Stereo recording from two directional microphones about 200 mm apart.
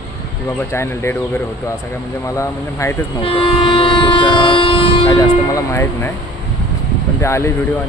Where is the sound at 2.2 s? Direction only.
15° left (ahead or behind).